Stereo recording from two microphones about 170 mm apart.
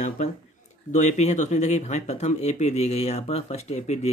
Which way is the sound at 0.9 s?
40° left (ahead or behind).